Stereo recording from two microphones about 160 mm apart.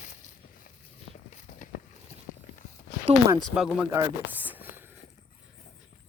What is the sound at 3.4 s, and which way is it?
Speech, 5° right (ahead or behind).